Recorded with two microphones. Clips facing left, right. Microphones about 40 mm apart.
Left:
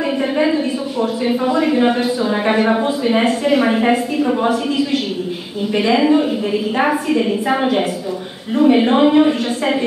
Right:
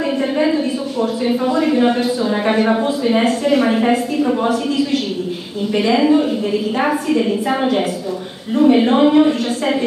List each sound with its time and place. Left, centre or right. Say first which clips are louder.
0.0 s a woman's voice: even; centre